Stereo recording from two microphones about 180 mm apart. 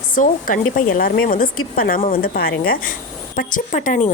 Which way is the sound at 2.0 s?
40° left (ahead or behind).